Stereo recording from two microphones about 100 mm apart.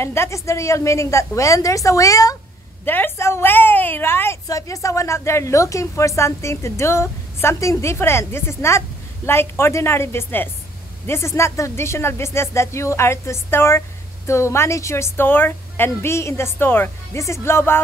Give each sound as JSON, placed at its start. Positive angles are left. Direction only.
{"t": 0.0, "sound": "a woman's voice", "side_deg": 25}
{"t": 2.8, "sound": "speech", "side_deg": 20}
{"t": 4.5, "sound": "speech", "side_deg": 35}